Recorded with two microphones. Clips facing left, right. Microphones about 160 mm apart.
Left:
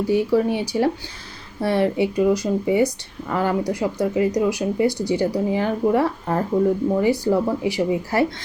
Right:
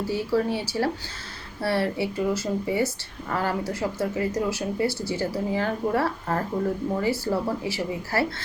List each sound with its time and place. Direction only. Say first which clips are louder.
0.0 s speech: left 6 dB; 15° left (ahead or behind)